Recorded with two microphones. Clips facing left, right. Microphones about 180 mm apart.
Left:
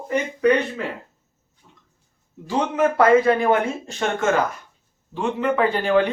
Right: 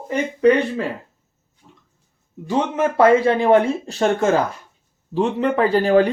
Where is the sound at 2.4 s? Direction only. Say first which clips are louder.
Right 1 dB; 25° right (ahead or behind).